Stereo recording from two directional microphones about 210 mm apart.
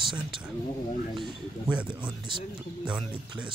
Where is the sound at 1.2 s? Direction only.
5° right (ahead or behind).